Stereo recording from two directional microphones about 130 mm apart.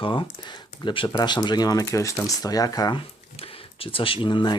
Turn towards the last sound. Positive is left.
turn(degrees=35)  # may be behind; listen again after turning